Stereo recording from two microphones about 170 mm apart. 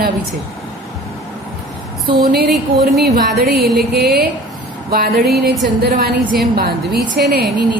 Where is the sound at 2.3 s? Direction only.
65° right (ahead or behind).